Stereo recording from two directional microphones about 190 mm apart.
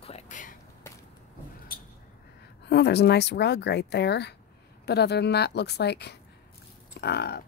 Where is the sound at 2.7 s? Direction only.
60° left (ahead or behind).